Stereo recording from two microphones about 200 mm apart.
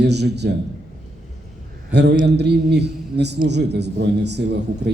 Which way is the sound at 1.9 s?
60° right (ahead or behind).